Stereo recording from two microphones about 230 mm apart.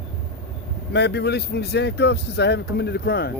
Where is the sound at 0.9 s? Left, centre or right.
Left.